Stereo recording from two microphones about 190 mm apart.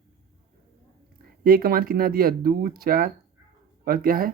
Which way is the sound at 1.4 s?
50° right (ahead or behind).